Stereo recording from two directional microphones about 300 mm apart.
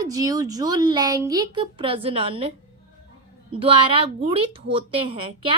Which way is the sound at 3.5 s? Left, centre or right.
Centre.